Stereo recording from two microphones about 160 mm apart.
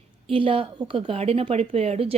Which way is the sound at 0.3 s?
35° right (ahead or behind).